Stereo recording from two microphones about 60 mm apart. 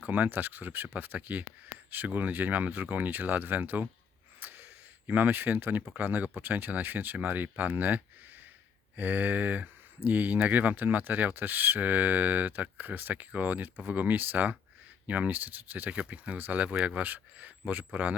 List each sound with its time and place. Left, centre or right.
0.0 s speech: right
4.4 s a sound: right
5.0 s speech: right